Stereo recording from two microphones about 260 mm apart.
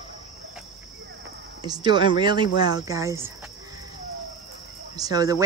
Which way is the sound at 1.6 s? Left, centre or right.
Centre.